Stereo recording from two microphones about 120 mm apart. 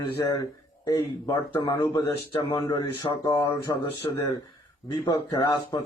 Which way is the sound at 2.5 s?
45° left (ahead or behind).